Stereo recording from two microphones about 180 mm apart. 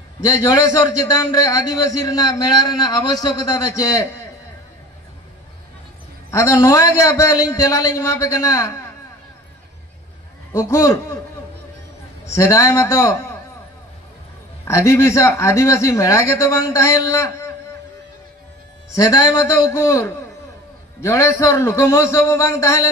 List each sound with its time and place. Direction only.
0.2 s a man's voice: 20° left (ahead or behind)
6.3 s a man's voice: 15° left (ahead or behind)
10.5 s a man's voice: 15° left (ahead or behind)
12.4 s a man's voice: 15° left (ahead or behind)
14.6 s a man's voice: 15° left (ahead or behind)
18.9 s a man's voice: 20° left (ahead or behind)